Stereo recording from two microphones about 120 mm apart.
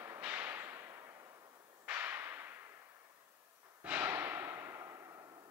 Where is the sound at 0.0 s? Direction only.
15° right (ahead or behind).